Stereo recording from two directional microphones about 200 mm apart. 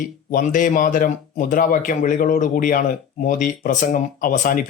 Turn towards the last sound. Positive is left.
turn(degrees=45)  # may be behind; listen again after turning